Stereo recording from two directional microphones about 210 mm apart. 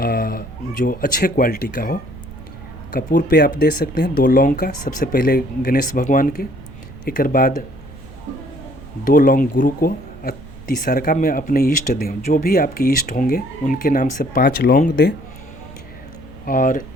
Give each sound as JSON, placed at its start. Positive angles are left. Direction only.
{"t": 0.0, "sound": "speech", "side_deg": 45}
{"t": 9.0, "sound": "speech", "side_deg": 40}
{"t": 16.5, "sound": "speech", "side_deg": 40}